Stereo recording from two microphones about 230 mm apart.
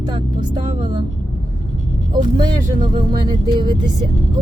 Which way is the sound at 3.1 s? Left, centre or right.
Centre.